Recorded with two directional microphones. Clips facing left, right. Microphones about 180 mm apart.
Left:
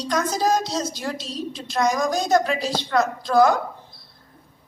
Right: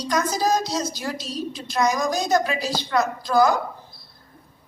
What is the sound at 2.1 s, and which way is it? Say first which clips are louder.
Speech: left 2 dB; 30° left (ahead or behind).